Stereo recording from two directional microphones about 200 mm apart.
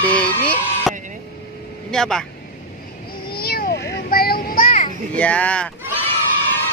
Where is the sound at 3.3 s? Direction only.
50° left (ahead or behind).